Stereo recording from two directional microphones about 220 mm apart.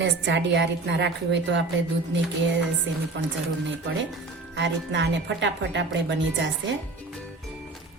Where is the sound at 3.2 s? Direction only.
55° right (ahead or behind).